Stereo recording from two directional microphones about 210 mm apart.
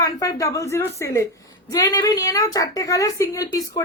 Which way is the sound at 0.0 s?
15° left (ahead or behind).